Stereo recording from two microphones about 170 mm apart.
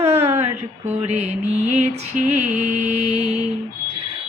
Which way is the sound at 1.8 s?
45° right (ahead or behind).